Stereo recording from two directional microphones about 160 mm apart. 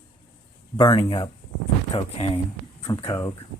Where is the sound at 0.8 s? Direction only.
30° left (ahead or behind).